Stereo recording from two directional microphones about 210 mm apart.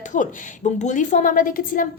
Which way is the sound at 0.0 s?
35° left (ahead or behind).